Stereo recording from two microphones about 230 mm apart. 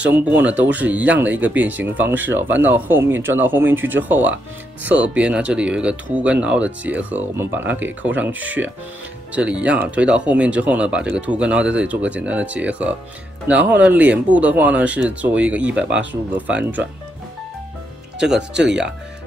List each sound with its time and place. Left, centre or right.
0.0 s speech: centre
18.2 s speech: centre